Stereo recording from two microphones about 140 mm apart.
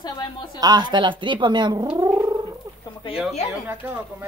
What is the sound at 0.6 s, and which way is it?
A woman's voice, 30° right (ahead or behind).